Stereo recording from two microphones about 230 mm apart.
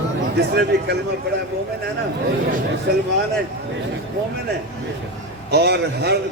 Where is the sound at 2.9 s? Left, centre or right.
Right.